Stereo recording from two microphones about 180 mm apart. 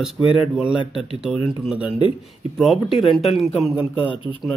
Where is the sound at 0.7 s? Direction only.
30° left (ahead or behind).